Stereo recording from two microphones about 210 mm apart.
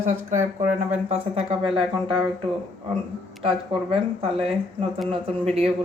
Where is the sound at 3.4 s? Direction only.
25° right (ahead or behind).